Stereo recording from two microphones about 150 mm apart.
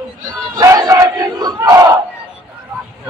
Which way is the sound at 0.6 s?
20° right (ahead or behind).